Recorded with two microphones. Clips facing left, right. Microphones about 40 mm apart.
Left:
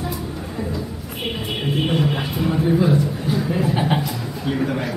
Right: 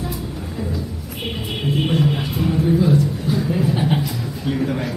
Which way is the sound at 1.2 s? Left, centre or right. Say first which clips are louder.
Even; centre.